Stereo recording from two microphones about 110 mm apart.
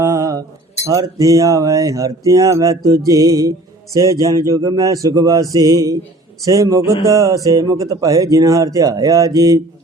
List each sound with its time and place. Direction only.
0.0 s mantra: 30° right (ahead or behind)
0.9 s speech: 35° right (ahead or behind)